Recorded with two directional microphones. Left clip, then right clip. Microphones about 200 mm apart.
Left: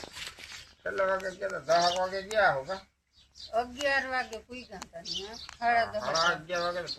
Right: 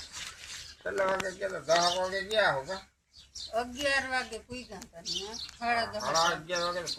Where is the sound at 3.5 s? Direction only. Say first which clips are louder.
Left 1 dB; centre (ahead or behind).